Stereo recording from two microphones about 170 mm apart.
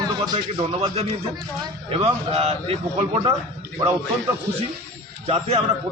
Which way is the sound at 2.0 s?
35° right (ahead or behind).